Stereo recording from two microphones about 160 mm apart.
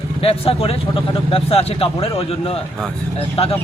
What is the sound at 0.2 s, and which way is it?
A man's voice, 35° left (ahead or behind).